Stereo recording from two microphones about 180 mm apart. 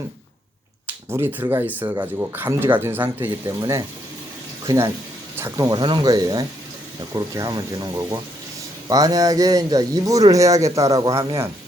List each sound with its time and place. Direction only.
1.1 s a man's voice: 10° right (ahead or behind)